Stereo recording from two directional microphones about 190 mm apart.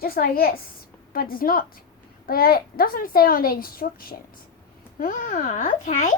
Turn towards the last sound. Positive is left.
turn(degrees=40)  # may be behind; listen again after turning